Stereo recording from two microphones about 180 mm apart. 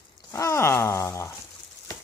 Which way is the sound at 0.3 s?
15° left (ahead or behind).